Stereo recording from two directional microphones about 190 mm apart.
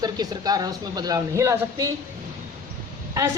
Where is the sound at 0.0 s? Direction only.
20° right (ahead or behind).